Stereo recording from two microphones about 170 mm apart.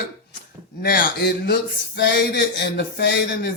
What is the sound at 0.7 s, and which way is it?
Speech, 60° left (ahead or behind).